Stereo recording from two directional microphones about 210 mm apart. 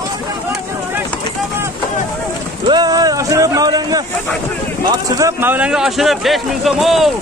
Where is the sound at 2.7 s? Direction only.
20° right (ahead or behind); by 7.1 s centre (ahead or behind).